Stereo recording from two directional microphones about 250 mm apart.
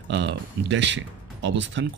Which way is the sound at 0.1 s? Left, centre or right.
Right.